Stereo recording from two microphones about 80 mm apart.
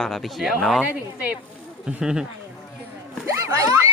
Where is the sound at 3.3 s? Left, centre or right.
Right.